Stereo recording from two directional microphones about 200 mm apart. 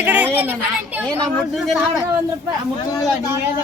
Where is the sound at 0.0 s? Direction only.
10° right (ahead or behind).